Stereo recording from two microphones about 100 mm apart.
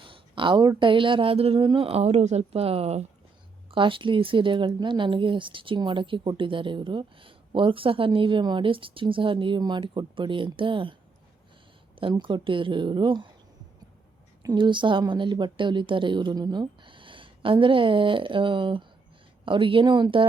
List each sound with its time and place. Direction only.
0.0 s a sound: 55° right (ahead or behind)
0.8 s speech: 55° right (ahead or behind); by 1.6 s 75° right (ahead or behind)
1.6 s speech: 60° right (ahead or behind); by 3.1 s 90° right
3.7 s speech: 60° right (ahead or behind)
12.2 s speech: 55° right (ahead or behind)
14.4 s speech: 50° right (ahead or behind)